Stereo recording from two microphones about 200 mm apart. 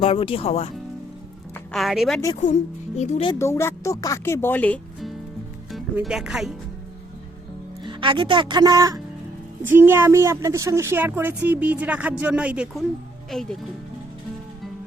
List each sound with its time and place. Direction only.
0.0 s speech: 30° left (ahead or behind)
1.7 s speech: centre (ahead or behind)
2.3 s speech: 35° left (ahead or behind)
3.3 s speech: 15° left (ahead or behind); by 6.5 s centre (ahead or behind)
7.9 s speech: 25° right (ahead or behind); by 13.6 s centre (ahead or behind)